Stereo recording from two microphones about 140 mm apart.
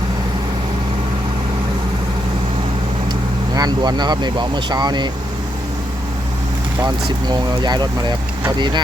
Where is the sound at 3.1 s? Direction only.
30° right (ahead or behind).